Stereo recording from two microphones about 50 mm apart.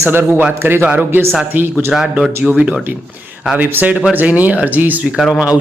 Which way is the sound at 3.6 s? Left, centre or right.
Right.